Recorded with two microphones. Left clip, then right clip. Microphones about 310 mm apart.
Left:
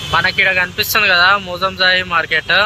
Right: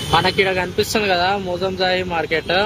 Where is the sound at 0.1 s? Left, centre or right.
Centre.